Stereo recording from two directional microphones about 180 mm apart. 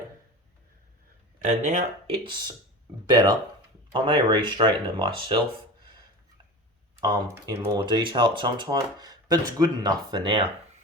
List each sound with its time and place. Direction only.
1.5 s speech: 45° right (ahead or behind)
2.2 s speech: 25° right (ahead or behind)
7.0 s speech: 25° right (ahead or behind)
7.9 s speech: 25° right (ahead or behind)